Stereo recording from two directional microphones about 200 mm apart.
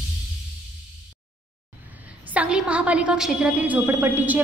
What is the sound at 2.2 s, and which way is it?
A woman's voice, 5° right (ahead or behind).